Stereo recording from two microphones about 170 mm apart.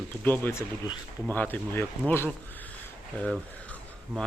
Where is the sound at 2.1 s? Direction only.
10° left (ahead or behind).